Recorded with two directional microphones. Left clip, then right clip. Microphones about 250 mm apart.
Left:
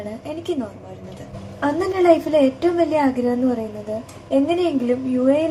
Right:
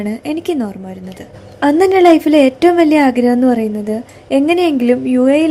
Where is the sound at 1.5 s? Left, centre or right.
Right.